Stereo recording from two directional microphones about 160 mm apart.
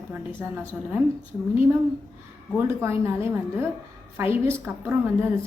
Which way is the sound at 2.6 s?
15° right (ahead or behind).